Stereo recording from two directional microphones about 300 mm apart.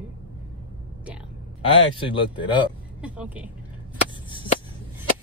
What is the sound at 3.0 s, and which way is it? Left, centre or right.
Speech, centre.